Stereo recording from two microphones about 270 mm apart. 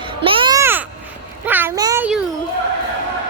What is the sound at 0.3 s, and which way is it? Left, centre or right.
Babbling, centre.